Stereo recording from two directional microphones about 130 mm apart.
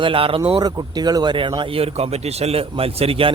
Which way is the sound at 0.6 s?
30° right (ahead or behind).